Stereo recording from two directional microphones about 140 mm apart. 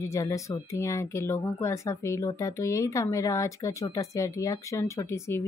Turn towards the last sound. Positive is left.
turn(degrees=20)  # may be behind; listen again after turning